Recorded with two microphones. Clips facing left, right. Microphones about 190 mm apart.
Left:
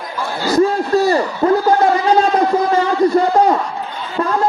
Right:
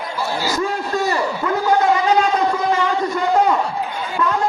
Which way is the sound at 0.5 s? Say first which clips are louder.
Left 13 dB; 35° left (ahead or behind).